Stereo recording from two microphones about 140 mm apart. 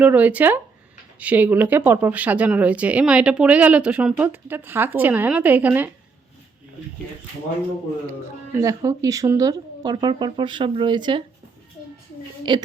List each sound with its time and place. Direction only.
0.0 s speech: 10° right (ahead or behind)
8.5 s speech: 25° right (ahead or behind)
12.5 s speech: 35° right (ahead or behind)